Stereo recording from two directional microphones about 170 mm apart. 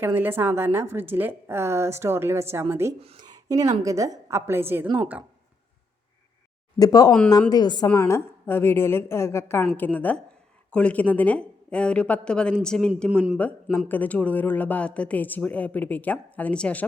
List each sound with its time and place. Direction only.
0.0 s a woman's voice: 10° right (ahead or behind)
3.0 s speech: 35° right (ahead or behind)
3.3 s a woman's voice: 20° right (ahead or behind)
6.7 s speech: 20° left (ahead or behind)